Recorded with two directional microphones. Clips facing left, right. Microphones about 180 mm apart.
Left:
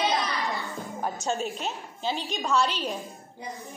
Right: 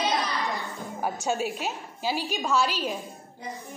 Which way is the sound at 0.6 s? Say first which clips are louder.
Right 1 dB; centre (ahead or behind).